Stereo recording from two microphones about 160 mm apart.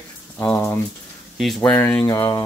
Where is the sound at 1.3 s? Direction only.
Centre (ahead or behind).